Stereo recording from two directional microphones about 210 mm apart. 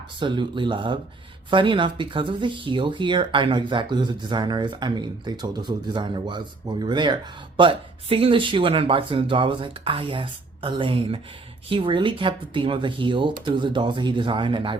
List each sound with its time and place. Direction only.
0.2 s speech: 20° right (ahead or behind)